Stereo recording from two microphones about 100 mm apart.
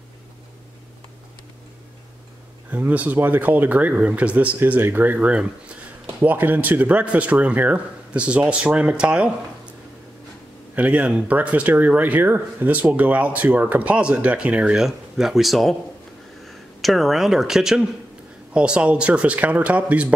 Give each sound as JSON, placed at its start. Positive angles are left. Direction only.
{"t": 2.7, "sound": "speech", "side_deg": -15}